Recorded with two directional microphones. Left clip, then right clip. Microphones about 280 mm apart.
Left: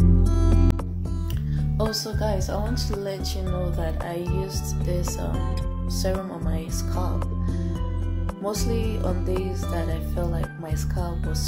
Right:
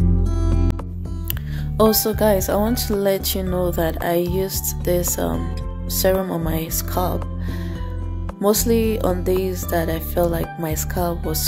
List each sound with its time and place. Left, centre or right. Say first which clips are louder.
0.0 s music: even; centre
1.5 s speech: right 10 dB; right
8.4 s speech: right 10 dB; right